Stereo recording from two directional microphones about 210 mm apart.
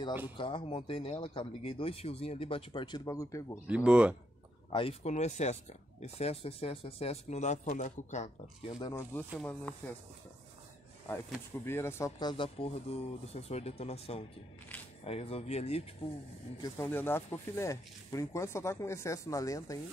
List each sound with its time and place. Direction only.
0.4 s speech: 25° left (ahead or behind)
3.6 s speech: 5° right (ahead or behind)
4.7 s speech: 30° left (ahead or behind)
8.7 s speech: 15° left (ahead or behind)
9.3 s speech: 5° left (ahead or behind)
11.6 s speech: 10° left (ahead or behind); by 15.9 s 30° left (ahead or behind)
16.6 s speech: 10° left (ahead or behind)